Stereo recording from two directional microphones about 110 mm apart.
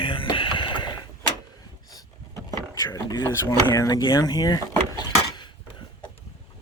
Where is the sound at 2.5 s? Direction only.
30° left (ahead or behind).